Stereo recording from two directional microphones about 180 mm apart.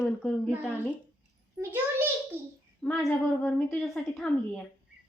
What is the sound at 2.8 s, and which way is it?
Speech, 5° left (ahead or behind).